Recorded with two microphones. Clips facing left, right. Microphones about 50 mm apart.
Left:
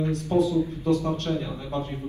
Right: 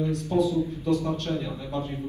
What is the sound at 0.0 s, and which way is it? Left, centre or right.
A man's voice, left.